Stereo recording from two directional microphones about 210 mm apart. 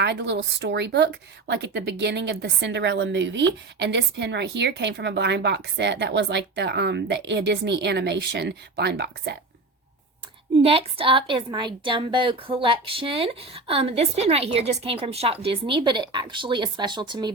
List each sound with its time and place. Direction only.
0.0 s a woman's voice: 55° right (ahead or behind)
10.6 s a woman's voice: 25° right (ahead or behind)